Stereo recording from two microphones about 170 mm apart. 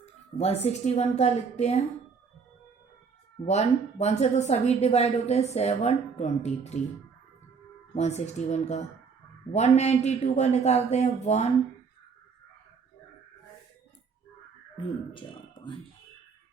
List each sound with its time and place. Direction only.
0.0 s a woman's voice: 40° left (ahead or behind)
3.4 s a woman's voice: 40° left (ahead or behind)
7.9 s a woman's voice: 40° left (ahead or behind)
14.8 s speech: 30° left (ahead or behind)